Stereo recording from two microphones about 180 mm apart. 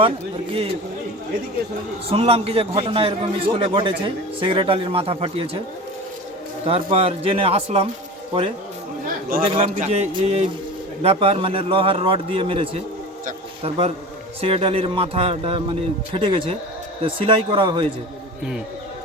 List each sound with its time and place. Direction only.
2.1 s a man's voice: 35° right (ahead or behind)
6.7 s a man's voice: 30° right (ahead or behind)